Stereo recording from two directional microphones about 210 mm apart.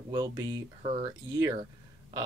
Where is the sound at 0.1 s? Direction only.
20° right (ahead or behind).